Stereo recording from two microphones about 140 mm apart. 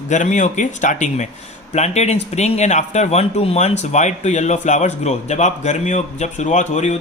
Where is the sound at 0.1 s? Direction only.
60° left (ahead or behind).